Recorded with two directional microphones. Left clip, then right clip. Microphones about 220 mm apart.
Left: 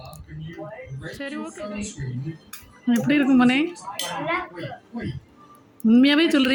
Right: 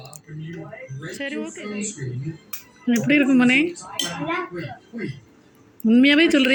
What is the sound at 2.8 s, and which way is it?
Speech, 15° left (ahead or behind).